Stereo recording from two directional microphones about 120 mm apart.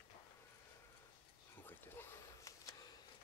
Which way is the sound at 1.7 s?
25° left (ahead or behind).